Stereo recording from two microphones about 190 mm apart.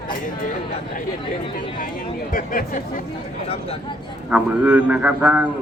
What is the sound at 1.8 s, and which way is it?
Speech, 45° left (ahead or behind).